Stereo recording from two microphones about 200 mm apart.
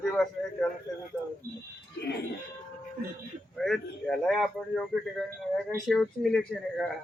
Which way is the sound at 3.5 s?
Centre (ahead or behind).